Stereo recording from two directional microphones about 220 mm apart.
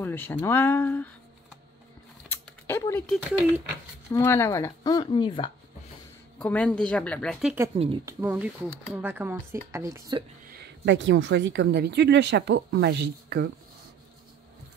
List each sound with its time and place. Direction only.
0.0 s speech: 10° left (ahead or behind)
2.2 s typing: 10° left (ahead or behind)
3.3 s a woman's voice: 5° right (ahead or behind)
4.1 s speech: 10° left (ahead or behind)
6.3 s a woman's voice: 5° left (ahead or behind)
7.7 s speech: 25° right (ahead or behind)
8.2 s speech: 10° right (ahead or behind)
10.5 s speech: 50° right (ahead or behind)